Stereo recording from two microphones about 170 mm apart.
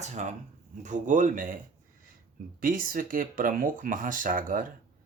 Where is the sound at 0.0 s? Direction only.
45° right (ahead or behind).